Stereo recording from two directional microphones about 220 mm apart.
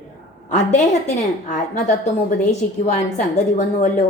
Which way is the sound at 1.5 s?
30° left (ahead or behind).